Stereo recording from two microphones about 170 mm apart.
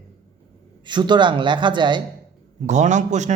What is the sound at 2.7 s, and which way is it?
Speech, 45° right (ahead or behind).